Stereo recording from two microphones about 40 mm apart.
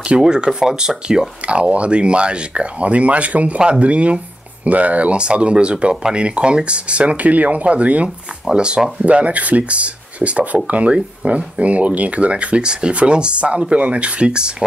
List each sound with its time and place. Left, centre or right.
0.2 s speech: centre
1.4 s speech: right
8.5 s speech: right
9.0 s speech: right